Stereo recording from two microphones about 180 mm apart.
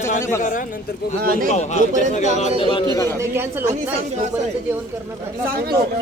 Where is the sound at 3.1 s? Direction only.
15° right (ahead or behind).